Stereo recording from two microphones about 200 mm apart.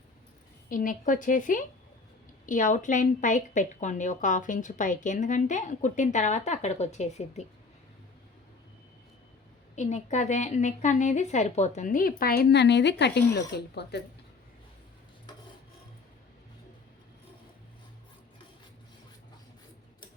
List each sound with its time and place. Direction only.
0.7 s a woman's voice: 45° left (ahead or behind)
9.7 s a woman's voice: 35° left (ahead or behind); by 14.0 s 55° left (ahead or behind)